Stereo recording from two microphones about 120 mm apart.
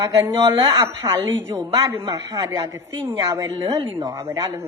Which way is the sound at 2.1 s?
30° right (ahead or behind).